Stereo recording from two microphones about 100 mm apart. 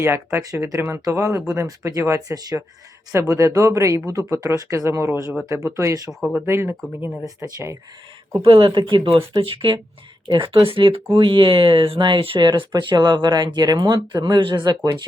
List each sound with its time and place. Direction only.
0.0 s speech: 25° right (ahead or behind)
0.4 s speech: 35° right (ahead or behind)
6.1 s speech: 5° right (ahead or behind)
6.4 s speech: 25° right (ahead or behind)
8.4 s speech: 60° right (ahead or behind)